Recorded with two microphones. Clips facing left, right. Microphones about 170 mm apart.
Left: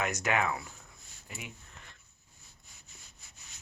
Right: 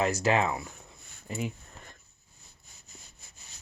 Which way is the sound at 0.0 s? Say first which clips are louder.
Right 5 dB; 30° right (ahead or behind).